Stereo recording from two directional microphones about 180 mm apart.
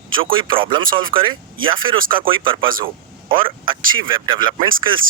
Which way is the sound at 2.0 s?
50° right (ahead or behind).